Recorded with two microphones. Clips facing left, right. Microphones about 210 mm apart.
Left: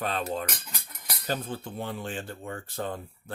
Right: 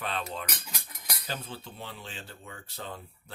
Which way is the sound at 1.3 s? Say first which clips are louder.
Left 8 dB; 50° left (ahead or behind).